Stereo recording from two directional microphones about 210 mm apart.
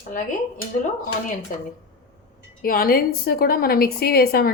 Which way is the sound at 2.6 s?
45° left (ahead or behind).